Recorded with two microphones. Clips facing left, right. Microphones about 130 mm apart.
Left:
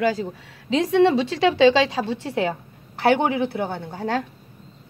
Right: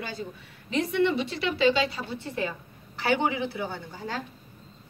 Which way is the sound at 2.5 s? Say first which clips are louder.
Left 7 dB; 55° left (ahead or behind).